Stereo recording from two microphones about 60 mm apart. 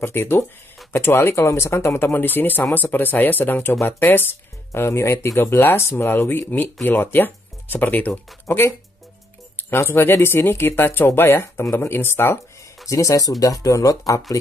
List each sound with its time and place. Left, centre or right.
0.0 s speech: left
4.7 s speech: left
8.5 s speech: left
12.8 s speech: left
13.4 s speech: left